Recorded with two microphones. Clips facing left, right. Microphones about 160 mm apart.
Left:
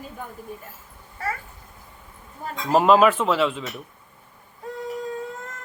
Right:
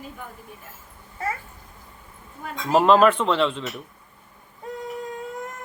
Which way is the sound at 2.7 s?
5° left (ahead or behind).